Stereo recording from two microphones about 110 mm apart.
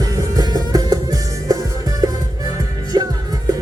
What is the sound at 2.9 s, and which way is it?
Music, 35° right (ahead or behind).